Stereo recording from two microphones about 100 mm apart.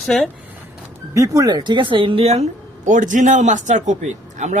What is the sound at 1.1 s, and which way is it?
Speech, 35° right (ahead or behind).